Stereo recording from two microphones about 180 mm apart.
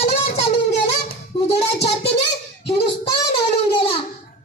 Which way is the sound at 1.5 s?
35° left (ahead or behind).